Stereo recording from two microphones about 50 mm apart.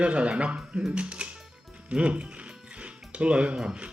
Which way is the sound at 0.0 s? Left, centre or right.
Right.